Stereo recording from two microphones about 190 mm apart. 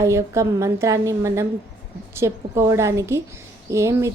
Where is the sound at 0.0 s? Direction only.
15° right (ahead or behind).